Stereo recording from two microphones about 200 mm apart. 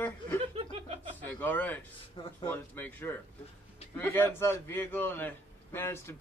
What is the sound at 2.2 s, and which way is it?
Speech, 25° left (ahead or behind).